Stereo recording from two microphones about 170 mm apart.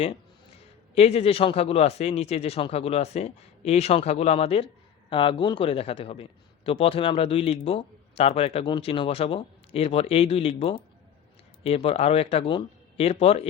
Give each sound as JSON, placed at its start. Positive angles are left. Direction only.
{"t": 0.9, "sound": "a man's voice", "side_deg": 40}